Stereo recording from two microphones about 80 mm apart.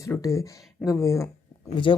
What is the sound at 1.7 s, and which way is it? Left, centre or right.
Speech, left.